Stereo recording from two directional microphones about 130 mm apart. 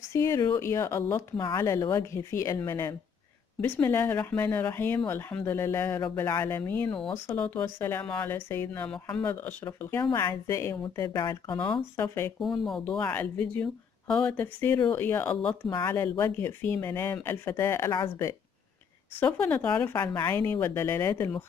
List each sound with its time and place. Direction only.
0.1 s a woman's voice: 25° left (ahead or behind)
1.3 s speech: 35° left (ahead or behind)
1.6 s a woman's voice: 25° left (ahead or behind)
12.0 s a woman's voice: 20° left (ahead or behind)
12.6 s speech: 5° left (ahead or behind); by 17.9 s 20° left (ahead or behind)
19.1 s a woman's voice: 10° left (ahead or behind)